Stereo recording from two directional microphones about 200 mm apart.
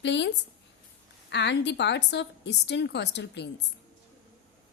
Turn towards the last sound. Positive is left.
turn(degrees=55)  # may be behind; listen again after turning